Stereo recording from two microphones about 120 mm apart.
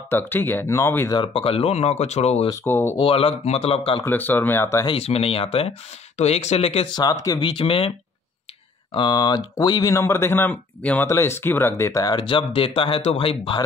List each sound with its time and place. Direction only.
0.1 s speech: 15° left (ahead or behind)
1.1 s speech: 50° left (ahead or behind)
2.6 s speech: 20° left (ahead or behind)
3.0 s speech: 50° left (ahead or behind)
4.0 s speech: 15° left (ahead or behind)
4.8 s speech: 55° left (ahead or behind)
7.0 s speech: 30° left (ahead or behind)
7.4 s speech: 50° left (ahead or behind)
8.9 s speech: 35° left (ahead or behind)
13.0 s speech: 55° left (ahead or behind)